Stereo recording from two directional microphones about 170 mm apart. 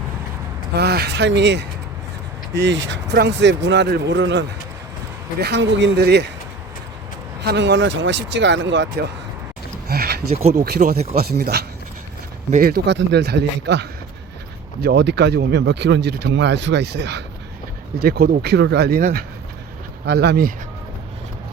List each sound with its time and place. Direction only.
0.7 s speech: 70° right (ahead or behind)
7.4 s speech: 90° right
9.9 s a sound: 65° right (ahead or behind)
10.5 s speech: 65° right (ahead or behind); by 11.1 s 45° right (ahead or behind)
11.1 s speech: 65° right (ahead or behind); by 13.8 s 90° right
14.8 s speech: 80° right
18.0 s speech: 65° right (ahead or behind)